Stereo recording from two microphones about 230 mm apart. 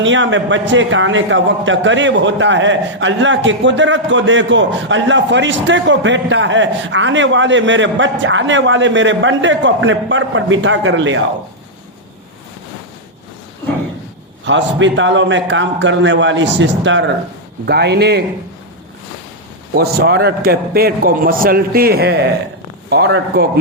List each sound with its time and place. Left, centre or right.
0.0 s a man's voice: right
14.4 s a man's voice: right
19.7 s a man's voice: right